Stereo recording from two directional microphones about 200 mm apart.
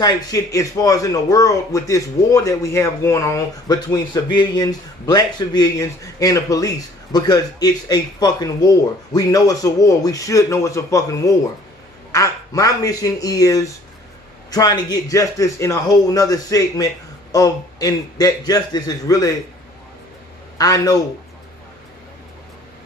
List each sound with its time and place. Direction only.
0.0 s speech: 20° left (ahead or behind)
20.5 s a man's voice: 15° left (ahead or behind)